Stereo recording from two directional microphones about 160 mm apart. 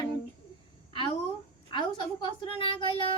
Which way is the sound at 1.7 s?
30° left (ahead or behind).